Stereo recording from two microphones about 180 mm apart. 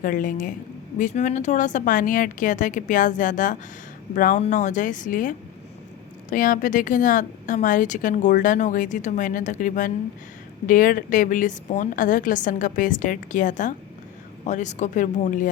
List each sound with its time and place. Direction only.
0.0 s a woman's voice: 50° left (ahead or behind)
6.3 s a woman's voice: 45° left (ahead or behind)